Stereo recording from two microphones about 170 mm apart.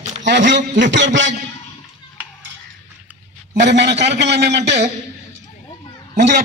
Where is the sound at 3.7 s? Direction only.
90° right.